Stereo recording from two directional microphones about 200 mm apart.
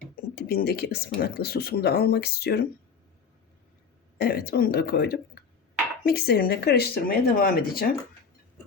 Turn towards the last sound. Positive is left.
turn(degrees=50)  # may be behind; listen again after turning